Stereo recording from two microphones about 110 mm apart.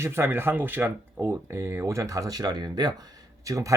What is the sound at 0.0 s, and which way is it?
Speech, 20° right (ahead or behind).